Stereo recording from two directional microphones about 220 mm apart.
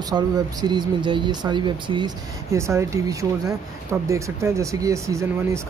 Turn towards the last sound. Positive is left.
turn(degrees=-15)  # may be behind; listen again after turning